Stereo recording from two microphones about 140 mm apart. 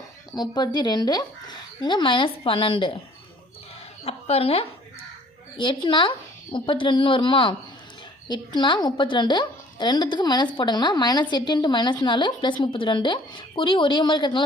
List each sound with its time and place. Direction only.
0.3 s a woman's voice: 30° left (ahead or behind)
4.0 s a woman's voice: 45° left (ahead or behind)
5.5 s a woman's voice: 35° left (ahead or behind)